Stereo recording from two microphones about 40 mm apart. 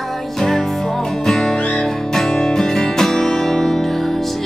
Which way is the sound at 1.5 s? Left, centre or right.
Left.